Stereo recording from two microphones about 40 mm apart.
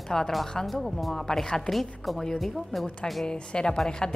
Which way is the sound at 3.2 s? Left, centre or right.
Left.